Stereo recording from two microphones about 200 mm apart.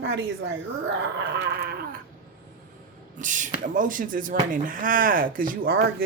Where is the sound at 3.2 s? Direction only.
40° right (ahead or behind).